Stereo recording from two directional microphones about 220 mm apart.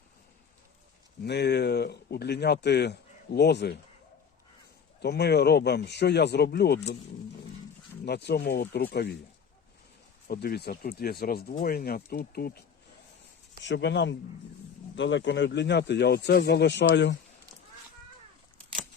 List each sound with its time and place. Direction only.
1.2 s speech: 50° left (ahead or behind)
4.9 s speech: 50° left (ahead or behind)
8.0 s speech: 50° left (ahead or behind)
10.2 s speech: 45° left (ahead or behind)